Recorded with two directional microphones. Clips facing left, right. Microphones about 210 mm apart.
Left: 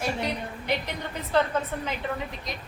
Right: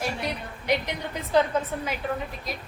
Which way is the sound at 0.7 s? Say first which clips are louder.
Right 4 dB; 15° right (ahead or behind).